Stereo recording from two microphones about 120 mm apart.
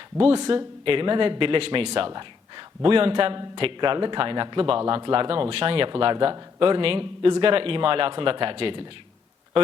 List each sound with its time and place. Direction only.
0.2 s a man's voice: 55° right (ahead or behind)